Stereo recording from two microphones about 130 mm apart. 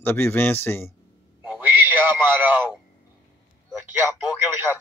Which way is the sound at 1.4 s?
15° right (ahead or behind).